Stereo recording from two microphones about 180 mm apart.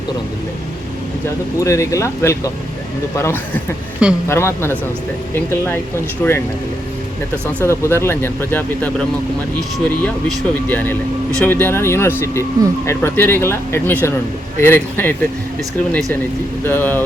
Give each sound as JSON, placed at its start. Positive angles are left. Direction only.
{"t": 1.5, "sound": "speech", "side_deg": 15}
{"t": 7.6, "sound": "speech", "side_deg": 15}
{"t": 16.6, "sound": "speech", "side_deg": 10}